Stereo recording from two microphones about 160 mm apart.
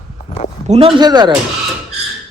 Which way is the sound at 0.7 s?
35° right (ahead or behind).